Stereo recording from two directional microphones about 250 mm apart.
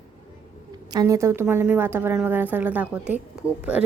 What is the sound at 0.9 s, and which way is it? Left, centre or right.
A woman's voice, centre.